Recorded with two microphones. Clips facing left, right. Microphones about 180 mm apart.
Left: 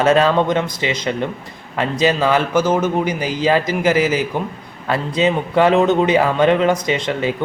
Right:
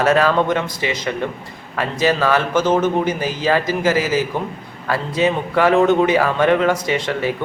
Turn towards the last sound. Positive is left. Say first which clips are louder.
# left 1 dB
turn(degrees=20)  # may be behind; listen again after turning